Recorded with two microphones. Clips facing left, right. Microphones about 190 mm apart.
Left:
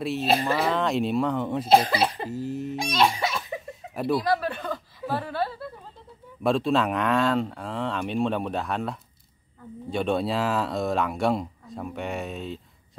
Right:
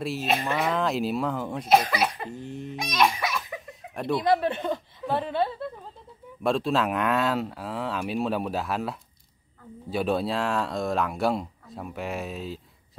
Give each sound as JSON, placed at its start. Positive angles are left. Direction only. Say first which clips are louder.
{"t": 0.2, "sound": "speech", "louder": "left 3 dB", "side_deg": 35}
{"t": 0.7, "sound": "speech", "louder": "left 2 dB", "side_deg": 0}
{"t": 1.7, "sound": "speech", "louder": "left 1 dB", "side_deg": 30}
{"t": 2.2, "sound": "speech", "louder": "left 5 dB", "side_deg": 5}
{"t": 2.7, "sound": "speech", "louder": "even", "side_deg": 30}
{"t": 3.9, "sound": "speech", "louder": "left 2 dB", "side_deg": 5}
{"t": 4.2, "sound": "chuckle", "louder": "right 3 dB", "side_deg": -20}
{"t": 6.4, "sound": "speech", "louder": "left 2 dB", "side_deg": 0}